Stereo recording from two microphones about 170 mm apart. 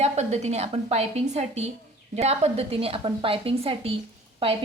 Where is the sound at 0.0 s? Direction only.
40° right (ahead or behind).